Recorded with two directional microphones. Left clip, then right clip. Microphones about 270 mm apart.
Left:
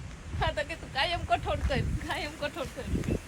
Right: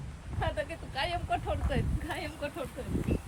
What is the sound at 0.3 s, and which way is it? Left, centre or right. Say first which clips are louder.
Speech: left 3 dB; centre.